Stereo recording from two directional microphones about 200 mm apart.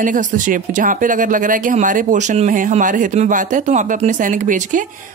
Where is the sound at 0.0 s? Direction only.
40° right (ahead or behind).